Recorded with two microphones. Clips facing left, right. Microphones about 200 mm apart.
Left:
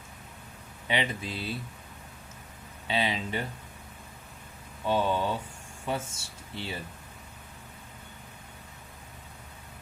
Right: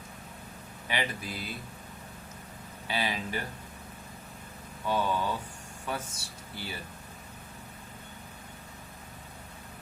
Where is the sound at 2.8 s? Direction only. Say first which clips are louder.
Left 3 dB; 25° left (ahead or behind).